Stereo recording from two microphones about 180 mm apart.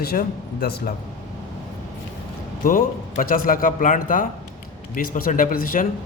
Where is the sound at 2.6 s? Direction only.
50° left (ahead or behind).